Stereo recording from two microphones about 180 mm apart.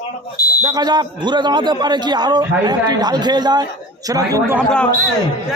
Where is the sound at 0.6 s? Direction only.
20° right (ahead or behind).